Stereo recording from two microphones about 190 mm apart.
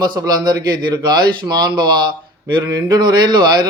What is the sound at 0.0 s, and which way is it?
A man's voice, 20° right (ahead or behind).